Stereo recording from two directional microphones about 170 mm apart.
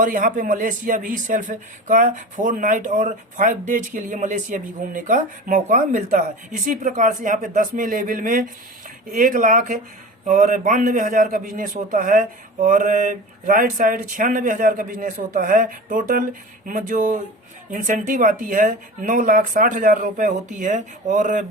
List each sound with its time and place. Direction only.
0.0 s a man's voice: 50° right (ahead or behind)